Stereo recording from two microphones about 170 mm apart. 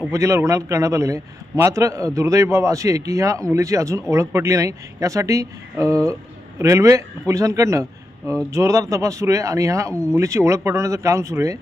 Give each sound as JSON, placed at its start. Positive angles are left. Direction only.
{"t": 0.1, "sound": "a man's voice", "side_deg": -15}